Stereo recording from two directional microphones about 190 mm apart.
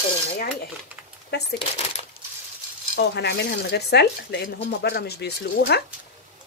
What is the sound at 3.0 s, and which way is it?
Speech, 60° left (ahead or behind).